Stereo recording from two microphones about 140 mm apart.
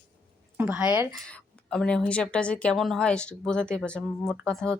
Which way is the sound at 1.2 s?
5° left (ahead or behind).